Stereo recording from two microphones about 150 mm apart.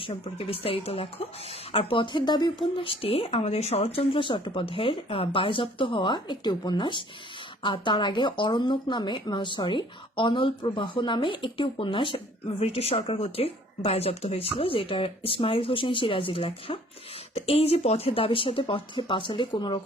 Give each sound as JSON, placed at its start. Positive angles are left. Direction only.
{"t": 0.1, "sound": "speech", "side_deg": 40}